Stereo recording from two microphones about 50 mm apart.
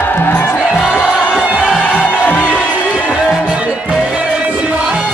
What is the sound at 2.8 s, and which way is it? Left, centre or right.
Music, left.